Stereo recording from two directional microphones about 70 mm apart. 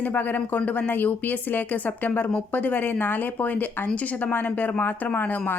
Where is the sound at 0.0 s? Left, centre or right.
Left.